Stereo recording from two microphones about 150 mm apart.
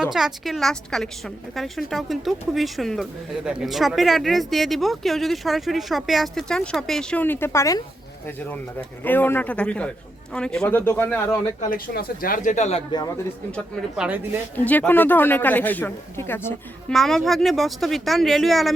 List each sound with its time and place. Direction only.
0.0 s speech: 5° right (ahead or behind); by 7.8 s 20° left (ahead or behind)
9.0 s speech: 15° left (ahead or behind)
11.6 s speech: 70° left (ahead or behind); by 12.8 s 50° left (ahead or behind)
13.9 s speech: 5° right (ahead or behind)
14.5 s speech: 10° left (ahead or behind)
16.9 s speech: centre (ahead or behind)